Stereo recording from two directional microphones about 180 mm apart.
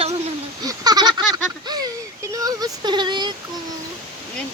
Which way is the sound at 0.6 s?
20° right (ahead or behind).